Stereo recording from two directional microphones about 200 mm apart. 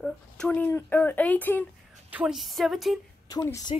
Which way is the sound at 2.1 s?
5° right (ahead or behind).